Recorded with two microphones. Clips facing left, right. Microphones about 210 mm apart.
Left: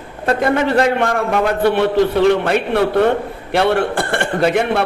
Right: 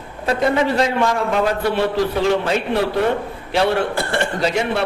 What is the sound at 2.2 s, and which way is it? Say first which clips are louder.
A man's voice: left 4 dB; 60° left (ahead or behind).